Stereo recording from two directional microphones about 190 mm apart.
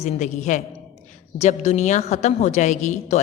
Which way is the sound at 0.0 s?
40° left (ahead or behind).